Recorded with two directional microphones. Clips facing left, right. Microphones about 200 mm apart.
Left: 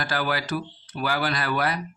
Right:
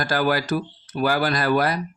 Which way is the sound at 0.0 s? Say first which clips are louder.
Right 5 dB; 45° right (ahead or behind).